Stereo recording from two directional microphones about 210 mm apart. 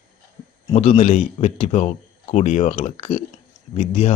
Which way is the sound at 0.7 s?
30° left (ahead or behind).